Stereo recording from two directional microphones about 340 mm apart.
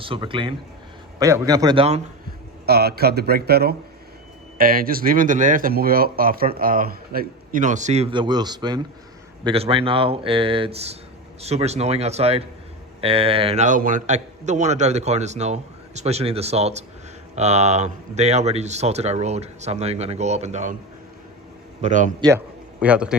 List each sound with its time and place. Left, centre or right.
0.0 s speech: centre
2.6 s speech: right
21.8 s speech: right
22.3 s a man's voice: centre